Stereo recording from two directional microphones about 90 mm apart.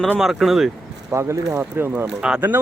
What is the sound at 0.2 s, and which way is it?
Speech, 5° right (ahead or behind).